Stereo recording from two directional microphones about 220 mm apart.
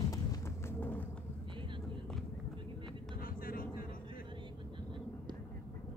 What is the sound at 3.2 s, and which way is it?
Vehicle, 40° left (ahead or behind).